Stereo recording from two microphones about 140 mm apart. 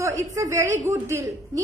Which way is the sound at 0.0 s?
20° right (ahead or behind).